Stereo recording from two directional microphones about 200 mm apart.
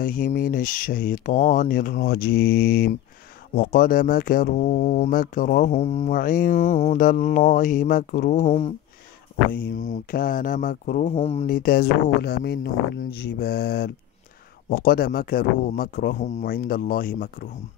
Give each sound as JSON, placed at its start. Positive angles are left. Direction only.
{"t": 0.0, "sound": "speech", "side_deg": 40}
{"t": 9.8, "sound": "speech", "side_deg": 40}
{"t": 11.4, "sound": "speech", "side_deg": 45}